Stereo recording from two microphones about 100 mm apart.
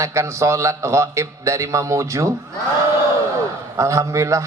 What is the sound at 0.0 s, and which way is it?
A man's voice, 30° right (ahead or behind).